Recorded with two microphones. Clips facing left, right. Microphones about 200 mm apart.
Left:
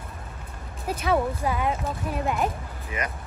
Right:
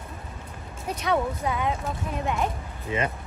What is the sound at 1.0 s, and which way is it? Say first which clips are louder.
Speech: left 1 dB; 5° left (ahead or behind).